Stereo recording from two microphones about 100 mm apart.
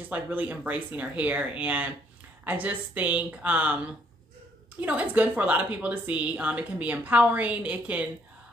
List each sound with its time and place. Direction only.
0.1 s speech: 20° right (ahead or behind)